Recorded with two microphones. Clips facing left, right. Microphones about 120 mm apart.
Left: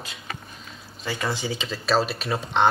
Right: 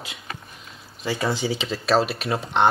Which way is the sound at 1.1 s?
25° right (ahead or behind).